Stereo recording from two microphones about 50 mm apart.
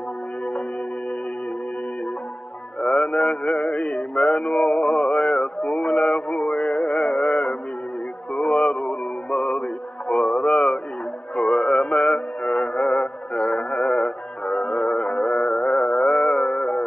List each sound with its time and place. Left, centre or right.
2.9 s music: left
4.5 s a sound: left
6.8 s music: left